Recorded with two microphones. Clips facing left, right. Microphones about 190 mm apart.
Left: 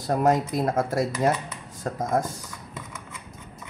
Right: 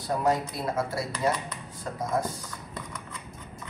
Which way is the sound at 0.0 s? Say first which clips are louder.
Left 4 dB; 45° left (ahead or behind).